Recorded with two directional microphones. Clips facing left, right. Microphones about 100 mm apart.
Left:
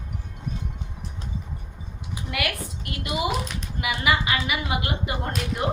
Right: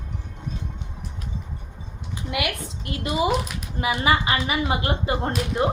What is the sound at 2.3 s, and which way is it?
A woman's voice, 20° right (ahead or behind).